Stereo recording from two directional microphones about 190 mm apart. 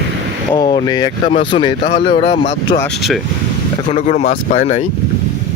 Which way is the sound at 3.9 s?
35° left (ahead or behind).